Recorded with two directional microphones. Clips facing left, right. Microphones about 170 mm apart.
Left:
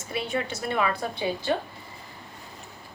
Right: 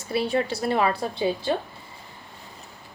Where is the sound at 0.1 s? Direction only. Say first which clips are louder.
Right 5 dB; 30° right (ahead or behind).